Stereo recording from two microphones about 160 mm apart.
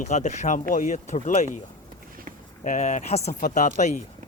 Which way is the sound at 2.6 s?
50° left (ahead or behind).